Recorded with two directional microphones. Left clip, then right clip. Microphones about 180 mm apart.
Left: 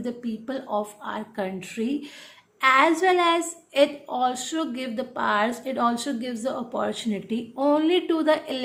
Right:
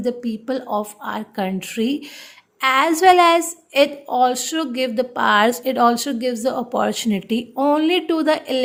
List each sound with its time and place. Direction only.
0.0 s a woman's voice: 35° right (ahead or behind)